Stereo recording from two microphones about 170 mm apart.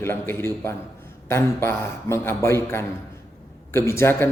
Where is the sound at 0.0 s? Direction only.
15° left (ahead or behind).